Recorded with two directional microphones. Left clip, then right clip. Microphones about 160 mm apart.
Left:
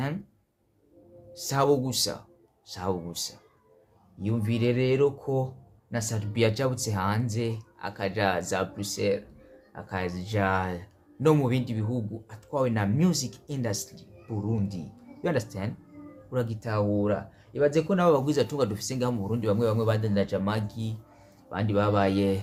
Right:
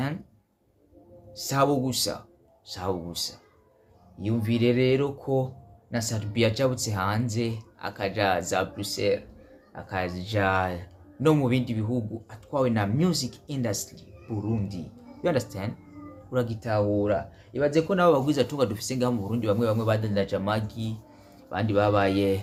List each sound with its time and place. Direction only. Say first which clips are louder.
1.3 s speech: even; 15° left (ahead or behind)
15.2 s speech: right 3 dB; 10° left (ahead or behind)